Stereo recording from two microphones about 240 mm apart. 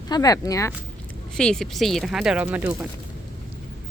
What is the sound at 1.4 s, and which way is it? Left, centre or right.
Speech, centre.